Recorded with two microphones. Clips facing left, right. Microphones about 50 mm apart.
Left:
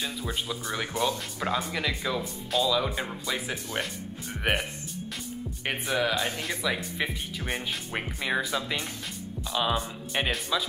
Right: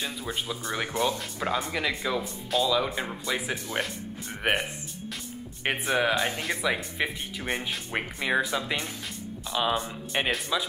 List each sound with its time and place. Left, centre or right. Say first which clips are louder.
0.0 s speech: even; centre
5.7 s speech: right 2 dB; right